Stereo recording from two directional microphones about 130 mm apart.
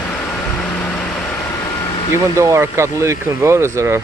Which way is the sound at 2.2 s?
25° right (ahead or behind).